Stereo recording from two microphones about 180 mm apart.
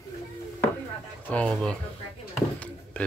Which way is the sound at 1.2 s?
5° left (ahead or behind).